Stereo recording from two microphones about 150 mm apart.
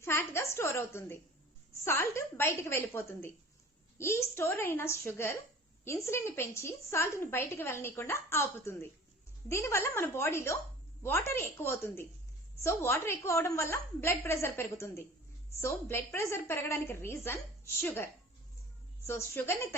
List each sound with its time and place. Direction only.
0.0 s a woman's voice: 20° left (ahead or behind)